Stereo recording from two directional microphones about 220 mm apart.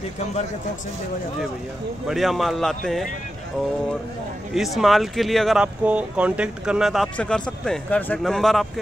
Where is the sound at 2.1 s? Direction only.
Centre (ahead or behind).